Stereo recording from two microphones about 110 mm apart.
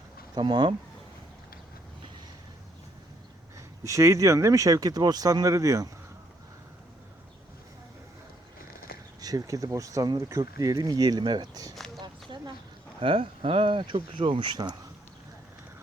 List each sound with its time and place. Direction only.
0.3 s speech: 45° right (ahead or behind)
3.8 s speech: 30° right (ahead or behind)
9.2 s speech: 35° right (ahead or behind)
12.0 s a sound: 45° right (ahead or behind)
13.0 s speech: 60° right (ahead or behind); by 14.8 s 45° right (ahead or behind)